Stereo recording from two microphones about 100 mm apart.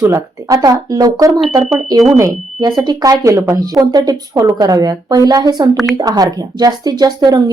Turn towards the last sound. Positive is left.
turn(degrees=-40)  # may be behind; listen again after turning